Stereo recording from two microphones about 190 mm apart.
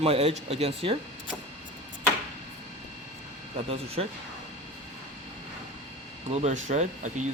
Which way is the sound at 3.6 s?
30° right (ahead or behind).